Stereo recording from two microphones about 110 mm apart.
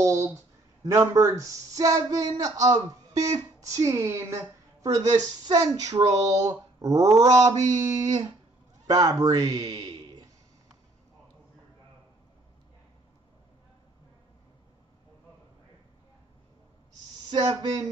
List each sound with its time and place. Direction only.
0.0 s a sound: 30° right (ahead or behind)
0.9 s a man's voice: 25° right (ahead or behind)
17.3 s speech: 45° right (ahead or behind)